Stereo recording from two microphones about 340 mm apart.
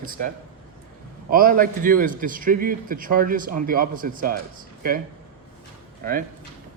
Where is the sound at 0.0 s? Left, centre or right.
Right.